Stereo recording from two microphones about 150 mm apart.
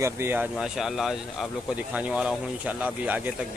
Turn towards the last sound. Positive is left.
turn(degrees=-10)  # may be behind; listen again after turning